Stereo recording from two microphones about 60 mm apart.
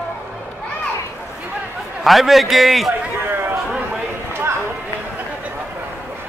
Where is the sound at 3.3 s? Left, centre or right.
Right.